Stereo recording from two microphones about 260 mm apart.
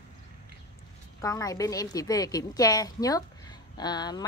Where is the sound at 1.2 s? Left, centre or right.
Centre.